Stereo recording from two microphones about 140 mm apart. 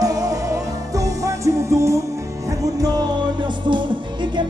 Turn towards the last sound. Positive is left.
turn(degrees=-35)  # may be behind; listen again after turning